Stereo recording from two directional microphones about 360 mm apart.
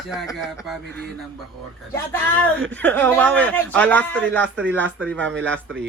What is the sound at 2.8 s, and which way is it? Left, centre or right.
A man's voice, centre.